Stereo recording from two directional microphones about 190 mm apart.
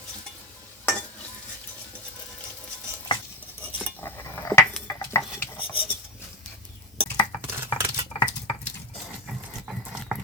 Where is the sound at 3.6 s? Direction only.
10° left (ahead or behind).